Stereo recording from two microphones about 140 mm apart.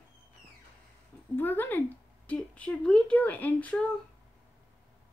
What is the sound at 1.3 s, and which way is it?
Speech, 15° left (ahead or behind).